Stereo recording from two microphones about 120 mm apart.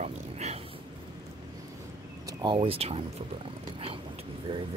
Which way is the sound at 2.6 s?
55° right (ahead or behind).